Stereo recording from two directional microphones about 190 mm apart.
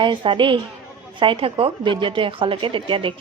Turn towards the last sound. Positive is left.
turn(degrees=-25)  # may be behind; listen again after turning